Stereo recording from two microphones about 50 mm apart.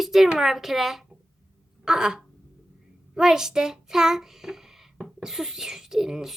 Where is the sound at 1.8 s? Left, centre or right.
Centre.